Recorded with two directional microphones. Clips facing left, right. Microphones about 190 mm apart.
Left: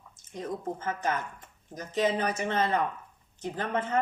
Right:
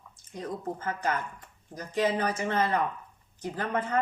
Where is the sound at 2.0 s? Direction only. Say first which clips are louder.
Even; 20° left (ahead or behind).